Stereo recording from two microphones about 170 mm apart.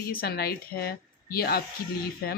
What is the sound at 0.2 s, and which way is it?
Speech, 65° left (ahead or behind).